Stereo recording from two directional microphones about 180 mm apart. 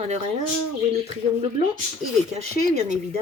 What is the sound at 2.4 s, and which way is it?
Speech, 40° right (ahead or behind).